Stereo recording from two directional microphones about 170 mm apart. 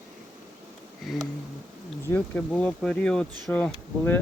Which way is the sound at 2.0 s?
10° left (ahead or behind).